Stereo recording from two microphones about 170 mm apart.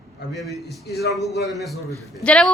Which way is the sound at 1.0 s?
70° left (ahead or behind).